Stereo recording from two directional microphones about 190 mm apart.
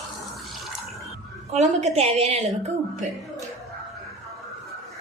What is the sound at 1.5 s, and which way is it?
A woman's voice, 35° right (ahead or behind).